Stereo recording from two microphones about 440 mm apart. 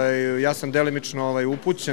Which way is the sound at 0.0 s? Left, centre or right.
Left.